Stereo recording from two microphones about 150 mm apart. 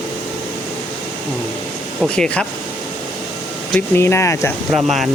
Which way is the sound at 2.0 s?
5° left (ahead or behind).